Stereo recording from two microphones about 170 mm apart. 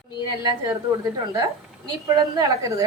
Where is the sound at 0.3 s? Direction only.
20° right (ahead or behind).